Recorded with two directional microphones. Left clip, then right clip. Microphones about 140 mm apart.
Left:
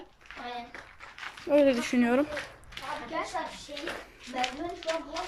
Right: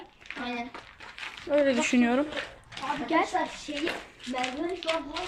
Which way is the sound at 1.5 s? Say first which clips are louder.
Left 2 dB; 10° left (ahead or behind).